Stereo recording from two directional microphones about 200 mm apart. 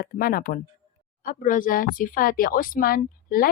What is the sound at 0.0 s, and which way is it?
Speech, 50° left (ahead or behind).